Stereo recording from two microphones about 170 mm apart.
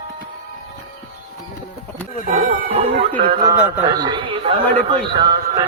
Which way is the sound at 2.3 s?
45° right (ahead or behind).